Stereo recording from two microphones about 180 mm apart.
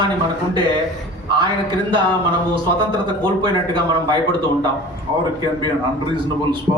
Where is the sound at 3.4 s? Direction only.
25° right (ahead or behind).